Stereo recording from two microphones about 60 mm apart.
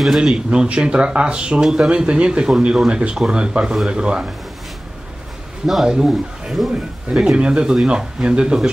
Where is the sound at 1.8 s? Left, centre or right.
Centre.